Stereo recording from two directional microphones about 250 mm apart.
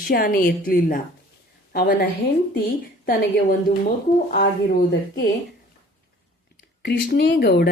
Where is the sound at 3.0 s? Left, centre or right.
Left.